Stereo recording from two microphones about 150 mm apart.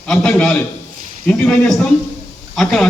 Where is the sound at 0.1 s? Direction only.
5° left (ahead or behind).